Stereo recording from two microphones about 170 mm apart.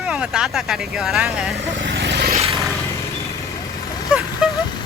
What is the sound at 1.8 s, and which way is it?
Vehicle, 90° right.